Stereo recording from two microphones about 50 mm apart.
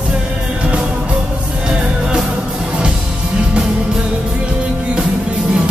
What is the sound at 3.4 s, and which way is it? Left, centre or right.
Music, centre.